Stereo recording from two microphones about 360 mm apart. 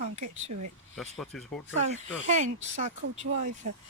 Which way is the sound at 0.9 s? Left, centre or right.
Centre.